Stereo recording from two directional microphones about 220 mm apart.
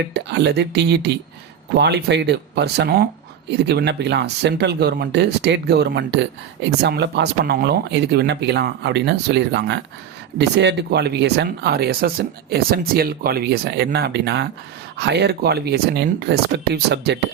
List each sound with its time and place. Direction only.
0.1 s speech: 50° right (ahead or behind)